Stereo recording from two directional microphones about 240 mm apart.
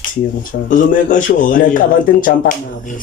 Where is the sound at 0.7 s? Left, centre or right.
Left.